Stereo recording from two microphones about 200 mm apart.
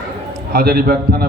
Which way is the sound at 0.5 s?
50° right (ahead or behind).